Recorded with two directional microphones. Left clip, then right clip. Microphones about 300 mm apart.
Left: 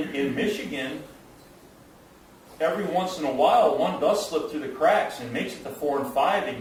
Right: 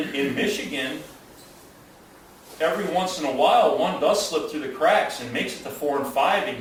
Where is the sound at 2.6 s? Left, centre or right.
Centre.